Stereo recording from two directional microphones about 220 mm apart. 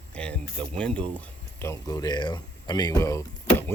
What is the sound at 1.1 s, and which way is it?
Speech, 10° left (ahead or behind).